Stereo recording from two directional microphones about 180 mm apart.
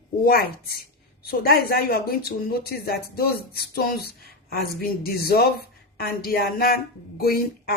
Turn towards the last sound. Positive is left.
turn(degrees=55)  # may be behind; listen again after turning